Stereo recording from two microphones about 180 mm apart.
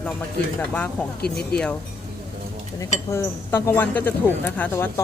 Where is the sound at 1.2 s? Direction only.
60° left (ahead or behind).